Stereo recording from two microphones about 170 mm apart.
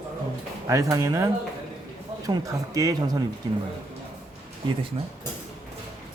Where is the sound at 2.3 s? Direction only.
20° right (ahead or behind).